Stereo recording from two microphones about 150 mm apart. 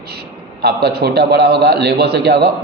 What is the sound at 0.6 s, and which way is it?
A man's voice, 90° right.